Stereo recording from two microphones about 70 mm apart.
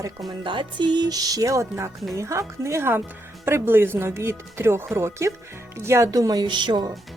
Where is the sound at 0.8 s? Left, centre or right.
Right.